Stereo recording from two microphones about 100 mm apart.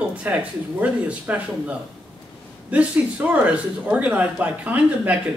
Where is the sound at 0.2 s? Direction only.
15° right (ahead or behind).